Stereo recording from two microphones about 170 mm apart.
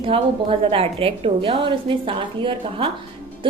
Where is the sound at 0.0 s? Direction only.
30° right (ahead or behind).